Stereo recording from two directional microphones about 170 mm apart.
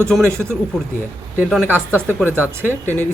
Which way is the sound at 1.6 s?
10° right (ahead or behind).